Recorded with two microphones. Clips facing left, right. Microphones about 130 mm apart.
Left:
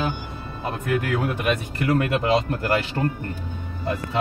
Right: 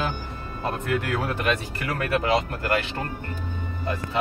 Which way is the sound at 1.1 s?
20° left (ahead or behind).